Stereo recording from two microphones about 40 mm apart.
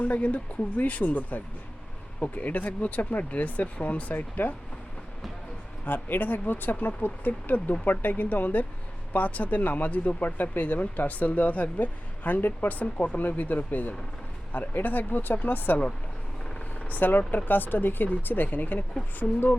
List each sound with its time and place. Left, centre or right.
0.0 s speech: left
0.8 s speech: left
6.1 s speech: left
12.5 s speech: left
16.8 s speech: left